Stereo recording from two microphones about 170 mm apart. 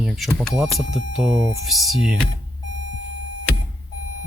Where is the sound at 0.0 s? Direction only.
Centre (ahead or behind).